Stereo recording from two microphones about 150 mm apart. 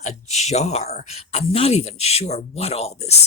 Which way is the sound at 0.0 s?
50° left (ahead or behind).